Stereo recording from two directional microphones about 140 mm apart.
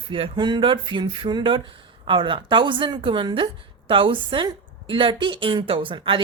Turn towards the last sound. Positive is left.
turn(degrees=-35)  # may be behind; listen again after turning